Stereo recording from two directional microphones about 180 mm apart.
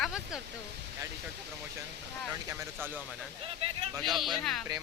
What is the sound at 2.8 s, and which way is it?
Speech, 10° right (ahead or behind).